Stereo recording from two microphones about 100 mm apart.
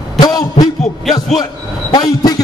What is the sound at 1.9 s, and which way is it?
Speech, 40° left (ahead or behind).